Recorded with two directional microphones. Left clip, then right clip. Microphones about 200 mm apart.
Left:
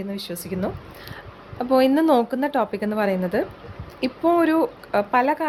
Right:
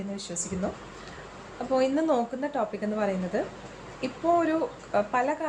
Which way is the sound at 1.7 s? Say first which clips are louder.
Left 7 dB; 55° left (ahead or behind).